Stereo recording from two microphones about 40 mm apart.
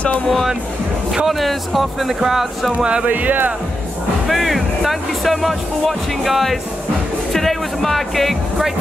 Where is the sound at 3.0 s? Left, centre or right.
Right.